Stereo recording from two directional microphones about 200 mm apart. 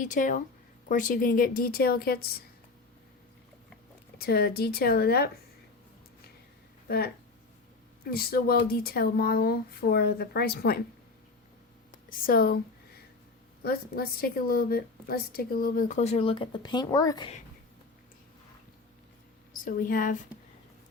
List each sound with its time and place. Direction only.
0.0 s a woman's voice: 40° left (ahead or behind)
4.2 s a woman's voice: 50° left (ahead or behind)
6.8 s speech: 50° left (ahead or behind)
8.1 s a woman's voice: 50° left (ahead or behind)
11.9 s a sound: 45° left (ahead or behind)
13.6 s a woman's voice: 50° left (ahead or behind); by 17.3 s 20° left (ahead or behind)
19.5 s a woman's voice: 45° left (ahead or behind)